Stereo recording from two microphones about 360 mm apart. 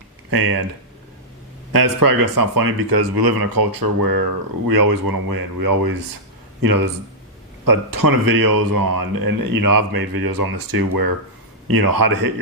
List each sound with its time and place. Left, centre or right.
0.3 s speech: right
1.7 s a man's voice: right